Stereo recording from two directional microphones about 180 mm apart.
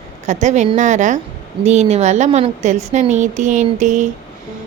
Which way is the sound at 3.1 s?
40° right (ahead or behind).